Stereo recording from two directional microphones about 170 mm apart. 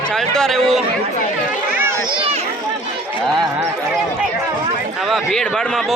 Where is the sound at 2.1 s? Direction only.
30° right (ahead or behind).